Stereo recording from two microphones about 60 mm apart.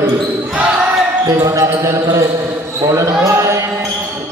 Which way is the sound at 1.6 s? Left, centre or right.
Right.